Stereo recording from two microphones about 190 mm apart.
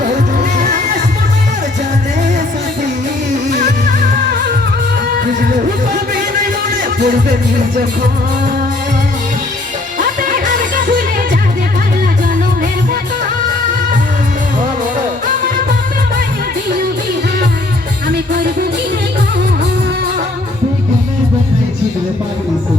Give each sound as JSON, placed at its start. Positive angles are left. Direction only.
{"t": 0.3, "sound": "music", "side_deg": -40}
{"t": 7.0, "sound": "music", "side_deg": -45}
{"t": 10.0, "sound": "music", "side_deg": -45}